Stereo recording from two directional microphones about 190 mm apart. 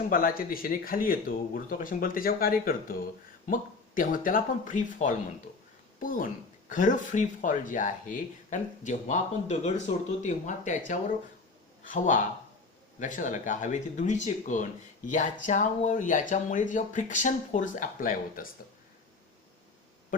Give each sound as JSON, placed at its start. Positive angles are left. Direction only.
{"t": 0.1, "sound": "speech", "side_deg": 50}